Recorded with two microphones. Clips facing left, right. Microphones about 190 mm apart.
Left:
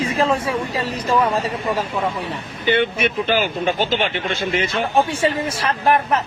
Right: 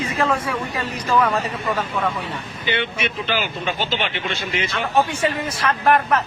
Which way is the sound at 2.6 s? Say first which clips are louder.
Left 6 dB; 50° left (ahead or behind).